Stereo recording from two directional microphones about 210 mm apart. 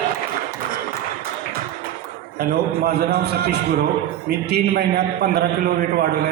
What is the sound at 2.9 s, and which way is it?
A man's voice, 50° right (ahead or behind).